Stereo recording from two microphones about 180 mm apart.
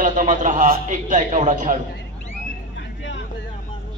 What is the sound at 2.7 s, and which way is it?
Vehicle, 80° left.